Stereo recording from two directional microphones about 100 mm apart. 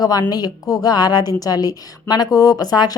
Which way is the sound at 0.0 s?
40° left (ahead or behind).